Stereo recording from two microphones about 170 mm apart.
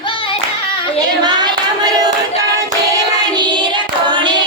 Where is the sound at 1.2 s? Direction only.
25° right (ahead or behind).